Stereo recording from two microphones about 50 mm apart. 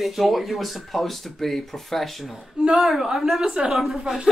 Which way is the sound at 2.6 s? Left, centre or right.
Centre.